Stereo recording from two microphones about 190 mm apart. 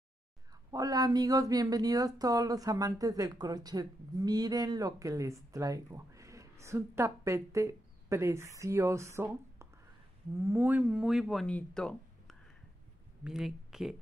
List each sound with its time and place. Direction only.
0.7 s speech: 20° right (ahead or behind); by 13.9 s centre (ahead or behind)